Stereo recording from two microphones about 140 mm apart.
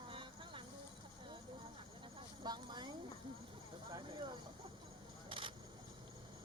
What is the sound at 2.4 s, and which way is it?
Clip-clop, 30° right (ahead or behind).